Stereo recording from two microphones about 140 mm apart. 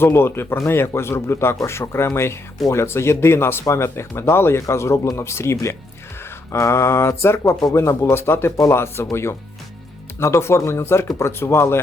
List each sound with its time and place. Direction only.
0.0 s speech: 15° left (ahead or behind)
10.2 s speech: 20° left (ahead or behind)